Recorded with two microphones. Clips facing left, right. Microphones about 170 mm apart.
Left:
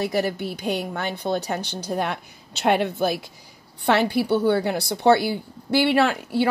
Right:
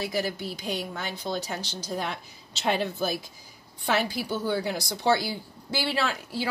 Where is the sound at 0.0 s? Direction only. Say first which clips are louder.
Left 6 dB; 60° left (ahead or behind).